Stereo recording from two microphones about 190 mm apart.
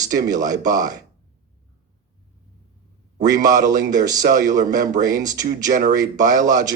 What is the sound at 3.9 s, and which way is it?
Speech, 20° right (ahead or behind).